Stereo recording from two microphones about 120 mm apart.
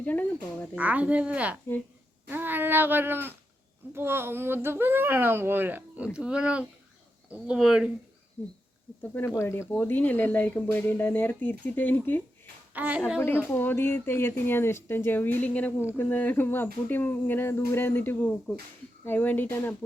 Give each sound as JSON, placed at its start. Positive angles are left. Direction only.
{"t": 0.0, "sound": "speech", "side_deg": 15}
{"t": 0.8, "sound": "speech", "side_deg": -10}
{"t": 9.3, "sound": "speech", "side_deg": 20}
{"t": 12.7, "sound": "a woman's voice", "side_deg": -15}
{"t": 13.1, "sound": "speech", "side_deg": 20}